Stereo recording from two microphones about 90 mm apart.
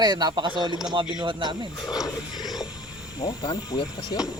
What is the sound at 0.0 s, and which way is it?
Speech, 50° right (ahead or behind).